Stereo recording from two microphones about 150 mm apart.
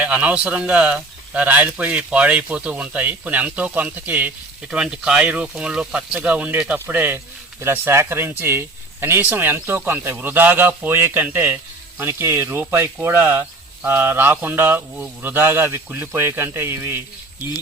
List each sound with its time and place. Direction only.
0.0 s speech: 10° right (ahead or behind)